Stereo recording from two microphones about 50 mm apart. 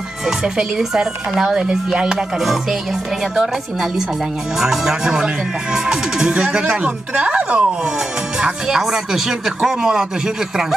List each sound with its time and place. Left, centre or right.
0.4 s speech: centre
8.4 s speech: centre